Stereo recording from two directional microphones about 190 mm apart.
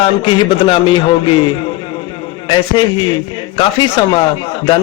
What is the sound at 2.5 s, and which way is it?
A man's voice, 25° left (ahead or behind).